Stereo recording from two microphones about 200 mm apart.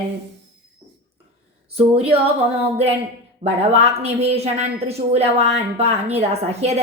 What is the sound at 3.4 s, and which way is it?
A woman's voice, 30° right (ahead or behind).